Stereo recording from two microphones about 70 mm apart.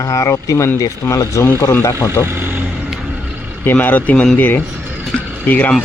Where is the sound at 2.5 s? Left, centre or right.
Right.